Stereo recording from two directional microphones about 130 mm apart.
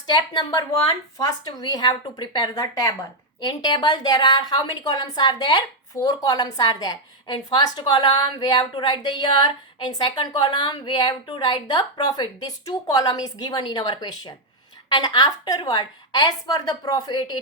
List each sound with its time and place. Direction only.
0.1 s a woman's voice: 35° left (ahead or behind)